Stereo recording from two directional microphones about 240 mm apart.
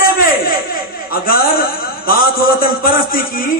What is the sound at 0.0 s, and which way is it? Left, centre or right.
A man's voice, left.